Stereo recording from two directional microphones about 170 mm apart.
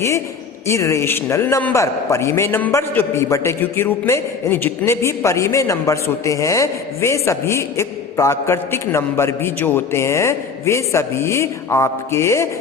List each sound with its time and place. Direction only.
0.7 s a man's voice: 15° left (ahead or behind)